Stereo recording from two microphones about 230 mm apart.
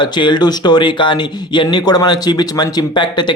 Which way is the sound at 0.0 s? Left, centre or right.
Centre.